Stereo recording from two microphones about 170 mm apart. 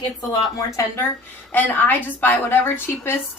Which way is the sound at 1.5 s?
10° left (ahead or behind).